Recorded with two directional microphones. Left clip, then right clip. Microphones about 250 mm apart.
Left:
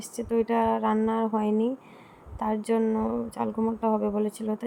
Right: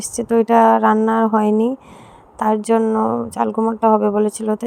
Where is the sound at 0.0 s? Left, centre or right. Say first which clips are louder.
Right 10 dB; right.